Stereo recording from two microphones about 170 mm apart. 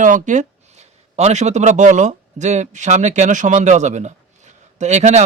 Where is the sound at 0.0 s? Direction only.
50° right (ahead or behind).